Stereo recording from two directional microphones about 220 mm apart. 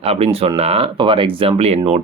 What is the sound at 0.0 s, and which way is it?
Speech, 25° right (ahead or behind).